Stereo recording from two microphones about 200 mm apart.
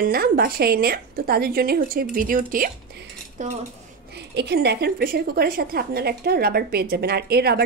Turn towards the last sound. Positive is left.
turn(degrees=-50)  # may be behind; listen again after turning